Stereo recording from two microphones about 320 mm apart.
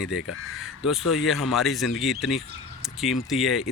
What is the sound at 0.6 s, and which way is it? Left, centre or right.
Speech, centre.